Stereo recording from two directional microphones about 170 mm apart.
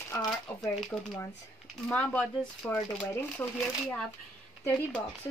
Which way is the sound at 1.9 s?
10° left (ahead or behind).